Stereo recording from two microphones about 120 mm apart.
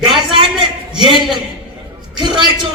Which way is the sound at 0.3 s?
45° right (ahead or behind).